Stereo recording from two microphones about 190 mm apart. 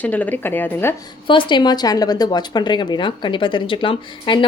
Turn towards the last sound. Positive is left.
turn(degrees=25)  # may be behind; listen again after turning